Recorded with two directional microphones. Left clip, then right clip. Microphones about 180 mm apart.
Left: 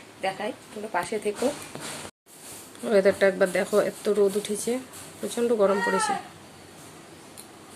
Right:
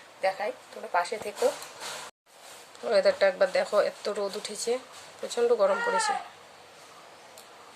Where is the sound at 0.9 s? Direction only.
5° right (ahead or behind).